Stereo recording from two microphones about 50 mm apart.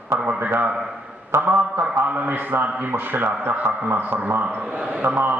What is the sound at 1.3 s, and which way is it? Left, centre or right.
A man's voice, right.